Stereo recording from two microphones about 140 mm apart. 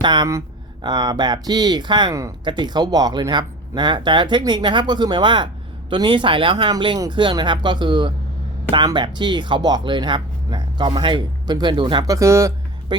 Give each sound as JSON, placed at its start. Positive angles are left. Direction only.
{"t": 0.0, "sound": "speech", "side_deg": -35}
{"t": 2.1, "sound": "speech", "side_deg": -25}
{"t": 12.9, "sound": "speech", "side_deg": -30}